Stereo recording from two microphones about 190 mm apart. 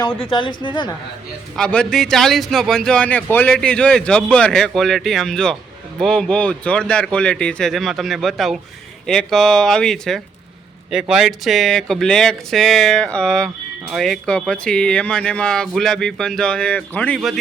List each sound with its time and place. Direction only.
0.2 s a woman's voice: 25° left (ahead or behind)
1.5 s a man's voice: 5° left (ahead or behind)